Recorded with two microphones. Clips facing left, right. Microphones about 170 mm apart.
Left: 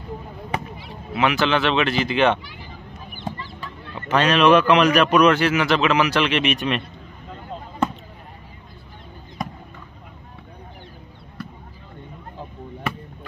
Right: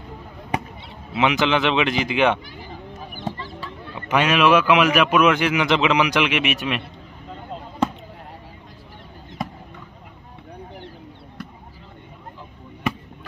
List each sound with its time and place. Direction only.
0.5 s speech: 20° right (ahead or behind)
3.6 s a man's voice: 10° right (ahead or behind)